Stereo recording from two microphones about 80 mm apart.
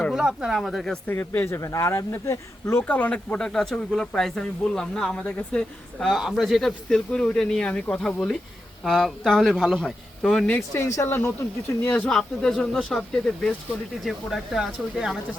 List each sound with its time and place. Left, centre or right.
0.1 s a man's voice: centre
1.0 s speech: left
2.8 s speech: centre
6.0 s a man's voice: centre
10.8 s speech: left
12.1 s a man's voice: centre